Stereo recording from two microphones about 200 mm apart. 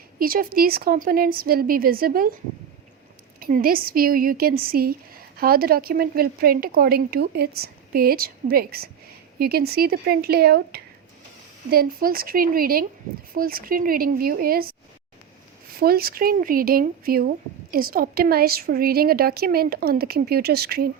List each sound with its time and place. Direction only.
0.2 s speech: 45° right (ahead or behind)
3.4 s speech: 45° right (ahead or behind)
15.8 s speech: 50° right (ahead or behind)